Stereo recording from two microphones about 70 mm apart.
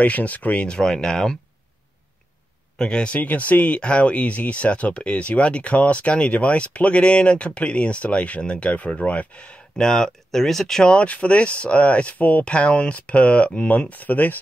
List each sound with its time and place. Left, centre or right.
0.0 s speech: left
0.7 s speech: centre
2.8 s speech: centre
9.8 s speech: centre; by 14.4 s left